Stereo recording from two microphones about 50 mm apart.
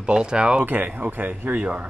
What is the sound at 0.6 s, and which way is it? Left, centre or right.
Speech, right.